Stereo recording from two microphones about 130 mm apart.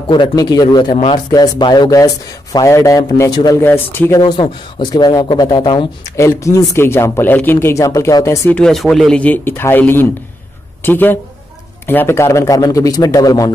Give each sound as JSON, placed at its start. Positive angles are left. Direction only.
{"t": 0.1, "sound": "speech", "side_deg": 35}
{"t": 3.6, "sound": "speech", "side_deg": 15}
{"t": 4.2, "sound": "speech", "side_deg": 35}
{"t": 6.1, "sound": "speech", "side_deg": 25}
{"t": 8.5, "sound": "a woman's voice", "side_deg": 5}